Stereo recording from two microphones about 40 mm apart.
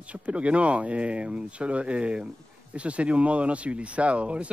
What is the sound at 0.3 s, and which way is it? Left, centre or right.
Speech, right.